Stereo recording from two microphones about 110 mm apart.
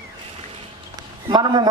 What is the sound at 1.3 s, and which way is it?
Speech, 45° right (ahead or behind).